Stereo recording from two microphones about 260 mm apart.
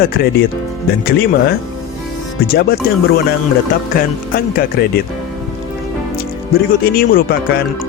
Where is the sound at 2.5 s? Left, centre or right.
Left.